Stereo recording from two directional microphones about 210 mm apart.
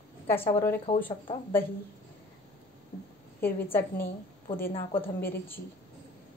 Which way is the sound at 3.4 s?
10° left (ahead or behind).